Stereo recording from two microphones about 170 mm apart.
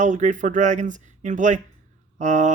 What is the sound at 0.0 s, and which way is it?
Speech, 50° right (ahead or behind).